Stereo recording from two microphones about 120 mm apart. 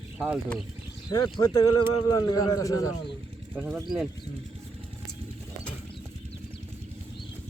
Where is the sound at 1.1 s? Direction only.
35° left (ahead or behind).